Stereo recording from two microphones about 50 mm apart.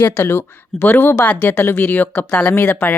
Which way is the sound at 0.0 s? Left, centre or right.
Left.